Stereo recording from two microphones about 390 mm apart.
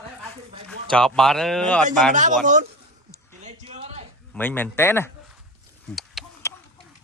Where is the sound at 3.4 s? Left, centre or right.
Centre.